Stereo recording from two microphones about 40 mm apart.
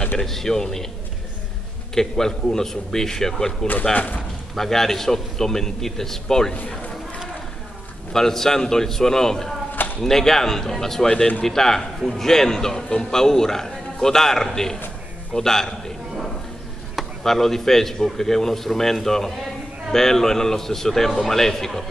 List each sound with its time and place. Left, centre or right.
0.2 s a man's voice: centre
2.0 s a man's voice: centre
3.9 s a man's voice: left
4.6 s a man's voice: centre
8.1 s a man's voice: centre
17.2 s a man's voice: centre